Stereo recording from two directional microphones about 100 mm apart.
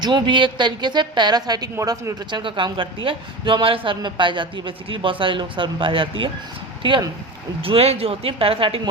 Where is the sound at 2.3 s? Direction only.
55° right (ahead or behind).